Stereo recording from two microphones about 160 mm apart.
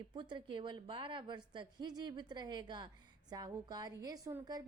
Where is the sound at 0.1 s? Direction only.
30° right (ahead or behind).